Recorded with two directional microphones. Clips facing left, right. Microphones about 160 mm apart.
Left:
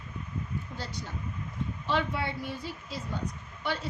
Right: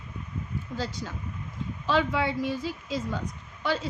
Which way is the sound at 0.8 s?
90° right.